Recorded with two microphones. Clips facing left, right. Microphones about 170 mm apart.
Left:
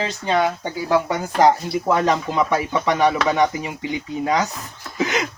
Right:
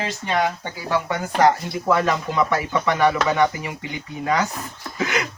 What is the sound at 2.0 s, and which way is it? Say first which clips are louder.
Speech: left 2 dB; 20° left (ahead or behind).